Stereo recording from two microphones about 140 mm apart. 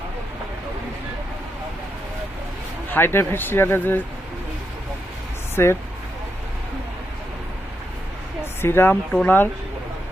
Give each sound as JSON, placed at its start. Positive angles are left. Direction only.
{"t": 2.9, "sound": "speech", "side_deg": 15}
{"t": 5.6, "sound": "speech", "side_deg": 20}
{"t": 8.6, "sound": "speech", "side_deg": 15}